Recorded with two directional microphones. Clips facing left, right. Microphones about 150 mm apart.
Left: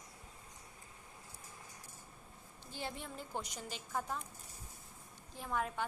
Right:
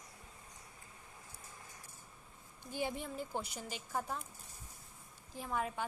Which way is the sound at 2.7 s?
10° right (ahead or behind).